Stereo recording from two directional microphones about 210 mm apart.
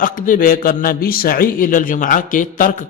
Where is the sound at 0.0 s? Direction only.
40° left (ahead or behind).